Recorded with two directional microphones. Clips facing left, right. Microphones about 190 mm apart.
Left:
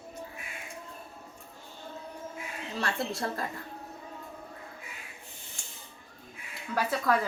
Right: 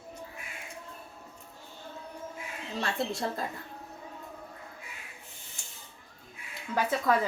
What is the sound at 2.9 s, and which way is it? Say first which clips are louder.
Speech: right 1 dB; centre (ahead or behind).